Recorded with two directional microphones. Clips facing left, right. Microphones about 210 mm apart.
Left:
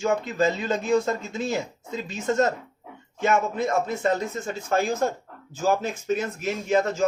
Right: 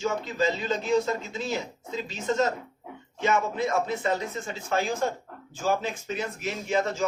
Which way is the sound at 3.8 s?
45° left (ahead or behind).